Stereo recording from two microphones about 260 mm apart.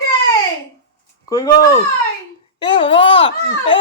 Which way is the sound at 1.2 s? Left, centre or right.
Centre.